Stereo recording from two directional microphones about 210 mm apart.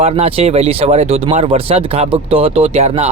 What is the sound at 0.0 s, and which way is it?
A man's voice, 30° right (ahead or behind).